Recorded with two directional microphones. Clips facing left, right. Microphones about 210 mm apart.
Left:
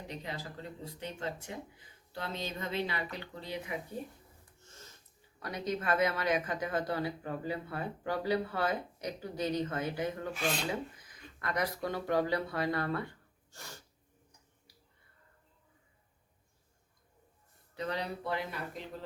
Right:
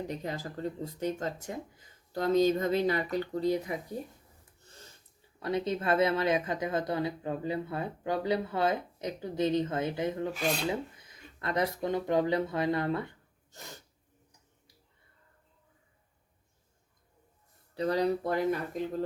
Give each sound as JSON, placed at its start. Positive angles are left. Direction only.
{"t": 0.2, "sound": "speech", "side_deg": -45}
{"t": 5.4, "sound": "a woman's voice", "side_deg": -25}
{"t": 13.5, "sound": "sneeze", "side_deg": -20}
{"t": 17.7, "sound": "speech", "side_deg": -35}